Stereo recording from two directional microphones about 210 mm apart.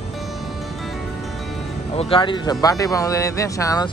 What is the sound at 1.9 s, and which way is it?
Speech, 25° left (ahead or behind).